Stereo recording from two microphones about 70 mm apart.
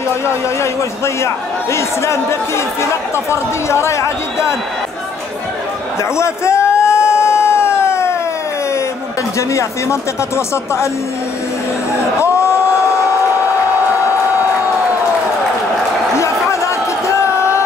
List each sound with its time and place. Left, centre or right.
0.6 s a man's voice: left
6.1 s a man's voice: left
6.8 s a sound: left
9.5 s a man's voice: left
12.2 s music: left
16.2 s a sound: left